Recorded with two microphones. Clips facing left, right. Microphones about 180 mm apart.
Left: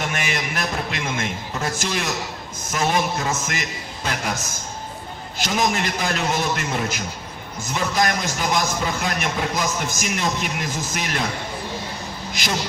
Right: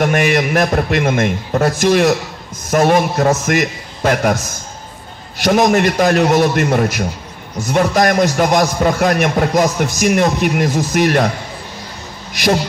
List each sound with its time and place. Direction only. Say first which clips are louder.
0.0 s a man's voice: right 12 dB; 55° right (ahead or behind)
5.6 s a man's voice: right 9 dB; 55° right (ahead or behind)